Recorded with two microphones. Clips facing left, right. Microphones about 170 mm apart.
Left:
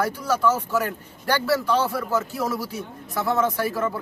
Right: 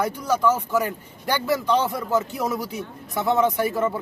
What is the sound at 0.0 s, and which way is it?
Speech, 10° right (ahead or behind).